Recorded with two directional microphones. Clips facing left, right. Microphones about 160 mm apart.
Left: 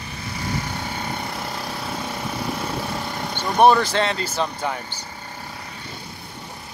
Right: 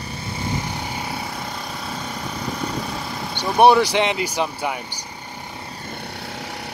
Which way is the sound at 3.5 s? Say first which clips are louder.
Right 2 dB; 10° right (ahead or behind).